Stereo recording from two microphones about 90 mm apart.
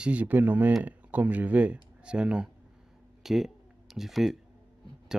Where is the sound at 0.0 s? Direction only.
15° right (ahead or behind).